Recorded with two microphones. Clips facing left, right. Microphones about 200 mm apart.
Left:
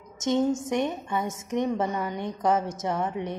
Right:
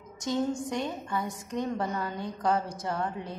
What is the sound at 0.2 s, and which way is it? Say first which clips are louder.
A woman's voice: left 5 dB; 20° left (ahead or behind).